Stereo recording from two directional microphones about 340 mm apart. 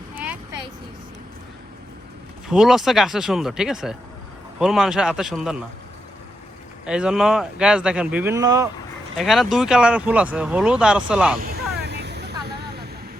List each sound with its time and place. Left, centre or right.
0.1 s vehicle: centre
2.5 s speech: centre
6.8 s speech: centre
11.8 s vehicle: right